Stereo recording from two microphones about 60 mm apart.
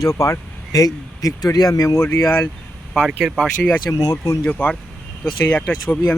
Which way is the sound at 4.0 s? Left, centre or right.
Left.